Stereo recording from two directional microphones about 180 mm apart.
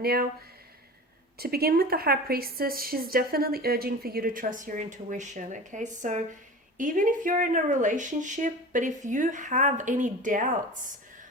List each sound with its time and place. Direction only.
0.0 s a woman's voice: 60° right (ahead or behind)
1.4 s a woman's voice: 60° right (ahead or behind)